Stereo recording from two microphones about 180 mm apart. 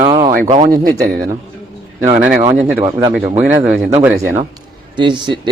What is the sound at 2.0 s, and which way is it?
Speech, 45° right (ahead or behind).